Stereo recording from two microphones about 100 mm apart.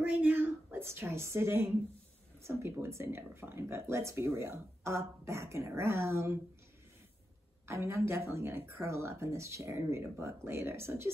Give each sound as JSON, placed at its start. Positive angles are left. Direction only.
{"t": 0.1, "sound": "a sound", "side_deg": -15}
{"t": 2.4, "sound": "speech", "side_deg": -25}
{"t": 7.6, "sound": "speech", "side_deg": -25}